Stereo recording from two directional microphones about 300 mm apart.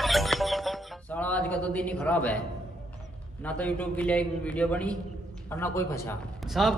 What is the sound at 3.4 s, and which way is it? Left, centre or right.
A man's voice, centre.